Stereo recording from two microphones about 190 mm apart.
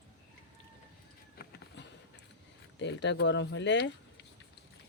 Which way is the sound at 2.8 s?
70° left (ahead or behind).